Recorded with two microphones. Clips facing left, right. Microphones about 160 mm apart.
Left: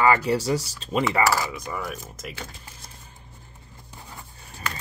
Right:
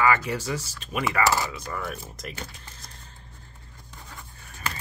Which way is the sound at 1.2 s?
20° right (ahead or behind).